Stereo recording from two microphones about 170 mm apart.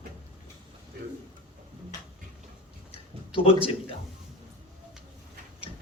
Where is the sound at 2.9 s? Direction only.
35° left (ahead or behind).